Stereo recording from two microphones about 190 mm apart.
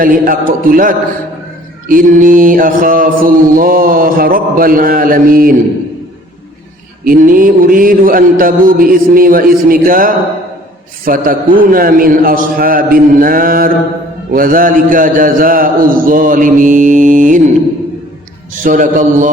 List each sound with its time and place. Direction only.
0.0 s mantra: 45° right (ahead or behind)
7.0 s mantra: 45° right (ahead or behind)
18.6 s mantra: 45° right (ahead or behind)